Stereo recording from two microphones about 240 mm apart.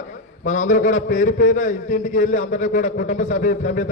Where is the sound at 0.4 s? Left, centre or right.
Left.